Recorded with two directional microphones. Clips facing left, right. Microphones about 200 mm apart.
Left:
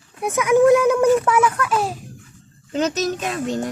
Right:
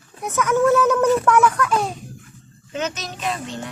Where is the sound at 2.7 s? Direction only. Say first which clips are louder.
Left 7 dB; 35° left (ahead or behind).